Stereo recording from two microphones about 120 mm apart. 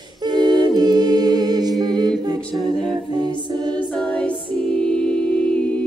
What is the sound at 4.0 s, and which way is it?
A capella, 10° left (ahead or behind).